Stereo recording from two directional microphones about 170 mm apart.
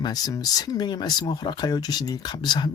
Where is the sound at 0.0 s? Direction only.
25° left (ahead or behind).